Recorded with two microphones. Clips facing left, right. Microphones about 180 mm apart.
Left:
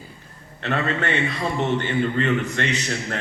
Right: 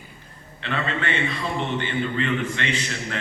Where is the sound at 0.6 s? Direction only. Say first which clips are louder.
Left 3 dB; 45° left (ahead or behind).